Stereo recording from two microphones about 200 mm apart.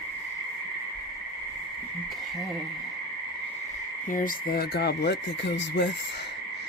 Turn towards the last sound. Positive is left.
turn(degrees=60)  # may be behind; listen again after turning